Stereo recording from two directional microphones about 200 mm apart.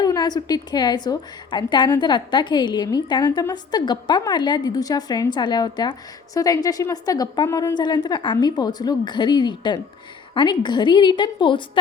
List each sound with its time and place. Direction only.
0.0 s a woman's voice: 20° left (ahead or behind)